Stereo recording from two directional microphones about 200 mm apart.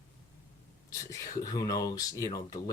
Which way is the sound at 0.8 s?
15° left (ahead or behind).